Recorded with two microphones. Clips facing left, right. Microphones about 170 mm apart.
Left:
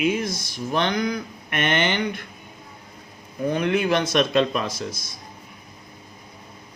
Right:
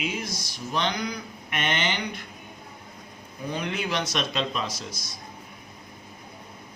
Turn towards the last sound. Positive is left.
turn(degrees=55)  # may be behind; listen again after turning